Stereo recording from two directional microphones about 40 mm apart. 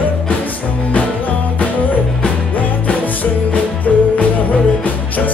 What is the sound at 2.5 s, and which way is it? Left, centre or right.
Music, left.